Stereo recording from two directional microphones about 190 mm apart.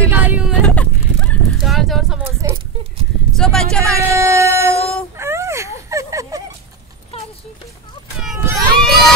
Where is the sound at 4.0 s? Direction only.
15° right (ahead or behind).